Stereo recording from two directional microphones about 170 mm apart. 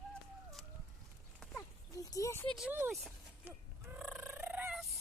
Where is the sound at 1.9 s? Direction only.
20° left (ahead or behind).